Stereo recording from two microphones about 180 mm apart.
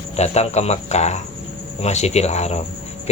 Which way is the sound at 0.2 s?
35° left (ahead or behind).